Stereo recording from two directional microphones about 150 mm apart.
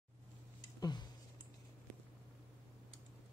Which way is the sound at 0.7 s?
25° left (ahead or behind).